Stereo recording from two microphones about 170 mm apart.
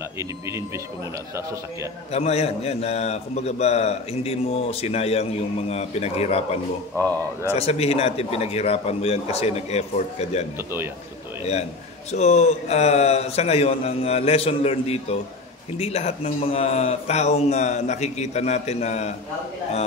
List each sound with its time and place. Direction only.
0.2 s speech: 15° right (ahead or behind)
2.1 s a man's voice: 40° left (ahead or behind)
12.1 s a man's voice: 40° left (ahead or behind)